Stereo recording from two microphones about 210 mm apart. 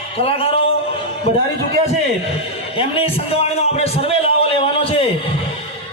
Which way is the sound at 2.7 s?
25° left (ahead or behind).